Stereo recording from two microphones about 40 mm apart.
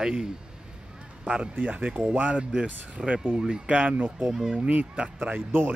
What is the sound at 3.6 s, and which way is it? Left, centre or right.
Speech, right.